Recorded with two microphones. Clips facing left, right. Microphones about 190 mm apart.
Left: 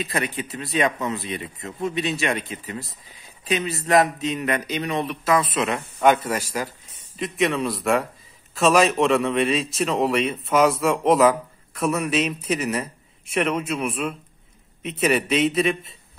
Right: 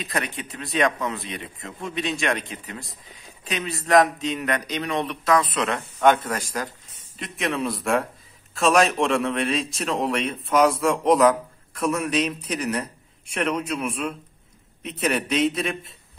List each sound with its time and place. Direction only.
0.0 s speech: 5° left (ahead or behind)